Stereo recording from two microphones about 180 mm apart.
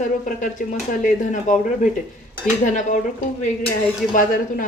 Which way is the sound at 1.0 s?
45° left (ahead or behind).